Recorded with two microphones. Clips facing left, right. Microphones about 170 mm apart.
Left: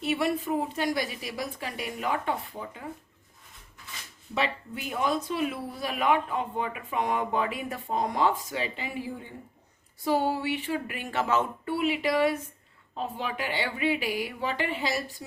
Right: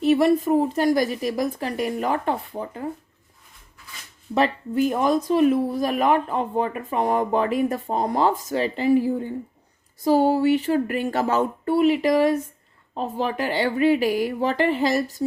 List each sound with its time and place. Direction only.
0.0 s speech: 40° right (ahead or behind)
4.4 s speech: 45° right (ahead or behind)